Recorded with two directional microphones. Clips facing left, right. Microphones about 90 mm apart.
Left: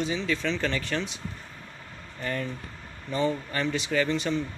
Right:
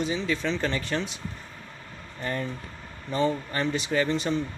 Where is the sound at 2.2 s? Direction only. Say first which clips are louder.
Right 1 dB; 25° right (ahead or behind).